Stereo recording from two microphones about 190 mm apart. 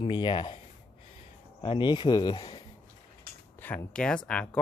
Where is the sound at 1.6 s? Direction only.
25° left (ahead or behind).